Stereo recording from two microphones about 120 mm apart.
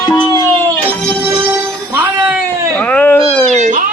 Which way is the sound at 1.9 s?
15° right (ahead or behind).